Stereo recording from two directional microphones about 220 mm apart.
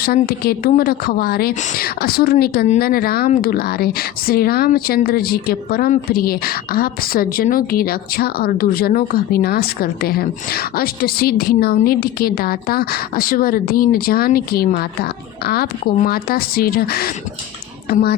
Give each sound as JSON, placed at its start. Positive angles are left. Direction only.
{"t": 0.0, "sound": "a woman's voice", "side_deg": 45}